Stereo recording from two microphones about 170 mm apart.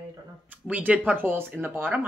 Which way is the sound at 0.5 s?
10° right (ahead or behind).